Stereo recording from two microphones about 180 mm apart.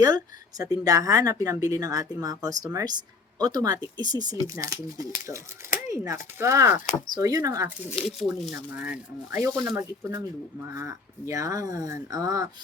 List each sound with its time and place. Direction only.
0.6 s speech: 20° right (ahead or behind)
8.0 s speech: centre (ahead or behind); by 12.5 s 20° right (ahead or behind)